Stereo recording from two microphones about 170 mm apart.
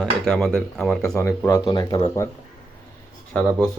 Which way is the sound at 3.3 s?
5° left (ahead or behind).